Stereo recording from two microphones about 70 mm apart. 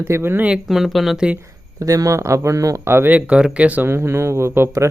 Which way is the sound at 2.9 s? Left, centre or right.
Right.